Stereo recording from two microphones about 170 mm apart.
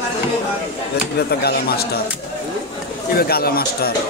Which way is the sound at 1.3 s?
70° left (ahead or behind).